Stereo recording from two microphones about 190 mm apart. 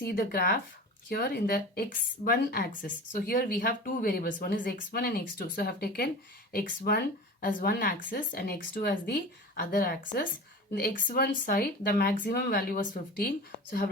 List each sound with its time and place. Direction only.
0.0 s speech: 55° left (ahead or behind)